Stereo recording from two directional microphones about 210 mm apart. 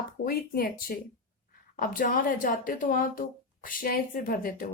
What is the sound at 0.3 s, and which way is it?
Speech, 45° left (ahead or behind).